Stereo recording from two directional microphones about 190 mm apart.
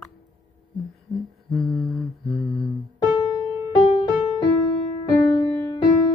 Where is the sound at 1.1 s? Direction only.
Centre (ahead or behind).